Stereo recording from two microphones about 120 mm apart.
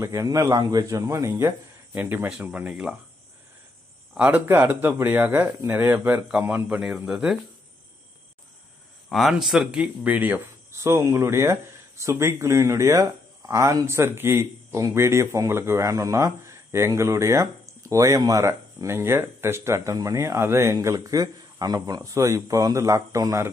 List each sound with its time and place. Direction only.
0.0 s speech: 25° right (ahead or behind); by 3.0 s 5° right (ahead or behind)
4.1 s speech: 10° right (ahead or behind)
6.8 s speech: 5° right (ahead or behind)
9.1 s speech: centre (ahead or behind); by 23.5 s 25° right (ahead or behind)